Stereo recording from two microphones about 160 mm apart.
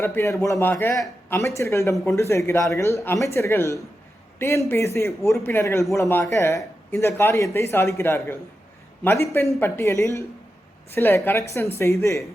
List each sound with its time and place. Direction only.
0.0 s a man's voice: 15° left (ahead or behind)